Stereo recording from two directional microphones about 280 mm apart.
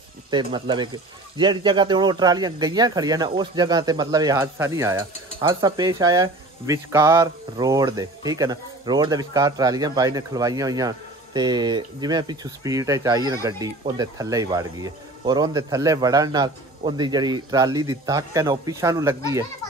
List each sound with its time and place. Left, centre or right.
0.3 s speech: centre